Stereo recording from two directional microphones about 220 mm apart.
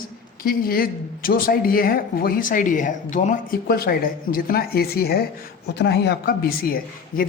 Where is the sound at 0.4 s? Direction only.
40° left (ahead or behind).